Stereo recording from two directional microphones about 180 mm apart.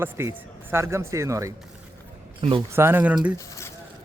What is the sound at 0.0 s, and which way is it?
Speech, 15° right (ahead or behind).